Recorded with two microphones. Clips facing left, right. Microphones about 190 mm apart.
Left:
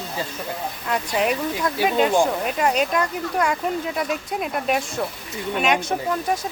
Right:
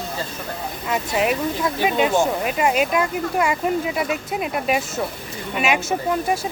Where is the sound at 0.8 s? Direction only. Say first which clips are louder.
Right 1 dB; 5° right (ahead or behind).